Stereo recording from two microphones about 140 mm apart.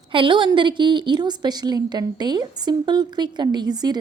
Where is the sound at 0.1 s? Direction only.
35° right (ahead or behind).